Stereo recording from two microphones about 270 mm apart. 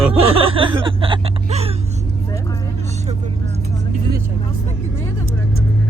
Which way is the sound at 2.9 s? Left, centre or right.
Right.